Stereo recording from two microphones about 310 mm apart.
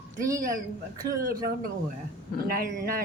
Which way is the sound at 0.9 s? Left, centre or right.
Right.